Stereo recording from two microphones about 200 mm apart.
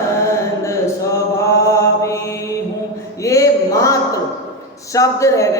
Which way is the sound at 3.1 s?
15° left (ahead or behind).